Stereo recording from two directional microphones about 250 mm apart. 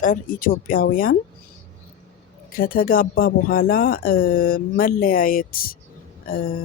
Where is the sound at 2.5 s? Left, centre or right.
Left.